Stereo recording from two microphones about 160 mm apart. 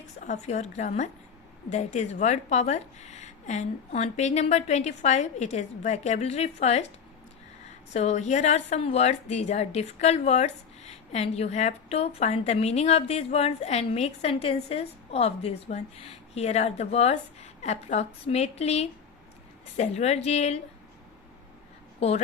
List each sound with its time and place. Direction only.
0.0 s a woman's voice: 45° left (ahead or behind)
7.9 s a woman's voice: 45° left (ahead or behind)
22.0 s a woman's voice: 40° left (ahead or behind)